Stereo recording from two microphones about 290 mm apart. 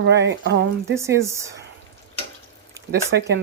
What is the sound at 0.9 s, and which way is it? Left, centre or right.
Speech, centre.